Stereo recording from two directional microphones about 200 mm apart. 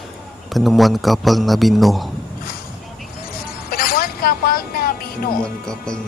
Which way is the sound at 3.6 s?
45° left (ahead or behind).